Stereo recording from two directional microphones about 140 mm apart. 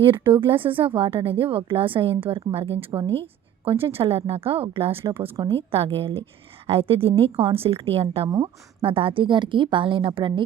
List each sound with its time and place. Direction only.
0.0 s a woman's voice: 40° right (ahead or behind)